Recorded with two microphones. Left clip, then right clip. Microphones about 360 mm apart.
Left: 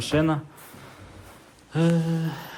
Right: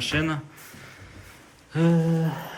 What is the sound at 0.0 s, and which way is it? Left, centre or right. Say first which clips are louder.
Speech: left 2 dB; centre.